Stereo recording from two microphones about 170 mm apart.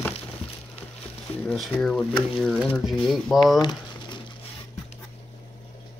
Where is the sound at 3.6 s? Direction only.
25° left (ahead or behind).